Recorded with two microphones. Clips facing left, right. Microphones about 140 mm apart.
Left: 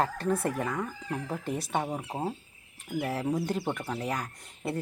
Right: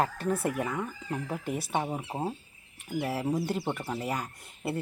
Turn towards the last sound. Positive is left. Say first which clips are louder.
# even
turn(degrees=-10)  # may be behind; listen again after turning